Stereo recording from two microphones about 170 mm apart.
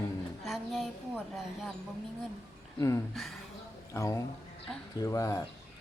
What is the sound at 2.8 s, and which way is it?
Speech, 20° left (ahead or behind).